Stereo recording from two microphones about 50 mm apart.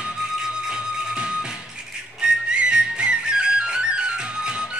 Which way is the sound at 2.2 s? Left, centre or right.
Centre.